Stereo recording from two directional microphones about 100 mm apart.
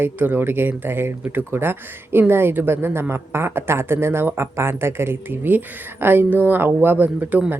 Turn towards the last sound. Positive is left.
turn(degrees=-20)  # may be behind; listen again after turning